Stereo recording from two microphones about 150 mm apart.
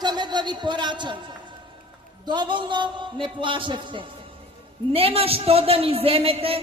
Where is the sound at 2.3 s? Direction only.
30° right (ahead or behind).